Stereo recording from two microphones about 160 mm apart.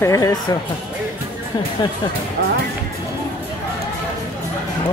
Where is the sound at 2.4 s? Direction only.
90° right.